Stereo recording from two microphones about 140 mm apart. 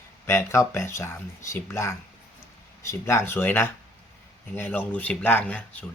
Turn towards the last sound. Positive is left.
turn(degrees=10)  # may be behind; listen again after turning